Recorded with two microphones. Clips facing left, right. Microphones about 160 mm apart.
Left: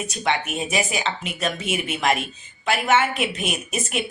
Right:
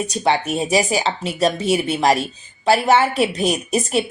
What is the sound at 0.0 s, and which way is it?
Speech, 35° right (ahead or behind).